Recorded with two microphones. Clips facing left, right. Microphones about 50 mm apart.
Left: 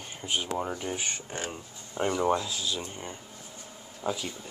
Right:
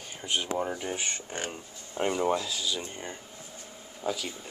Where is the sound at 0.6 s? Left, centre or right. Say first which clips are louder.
Right 1 dB; centre.